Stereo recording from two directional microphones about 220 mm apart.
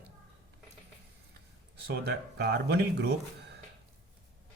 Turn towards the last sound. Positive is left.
turn(degrees=-50)  # may be behind; listen again after turning